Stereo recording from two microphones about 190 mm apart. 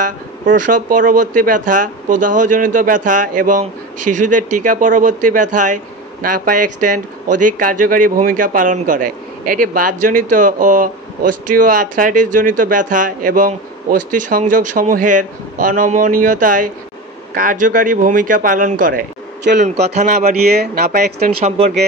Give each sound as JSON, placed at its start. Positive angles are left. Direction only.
{"t": 0.0, "sound": "a man's voice", "side_deg": -45}
{"t": 20.4, "sound": "speech", "side_deg": -55}
{"t": 21.5, "sound": "a man's voice", "side_deg": -35}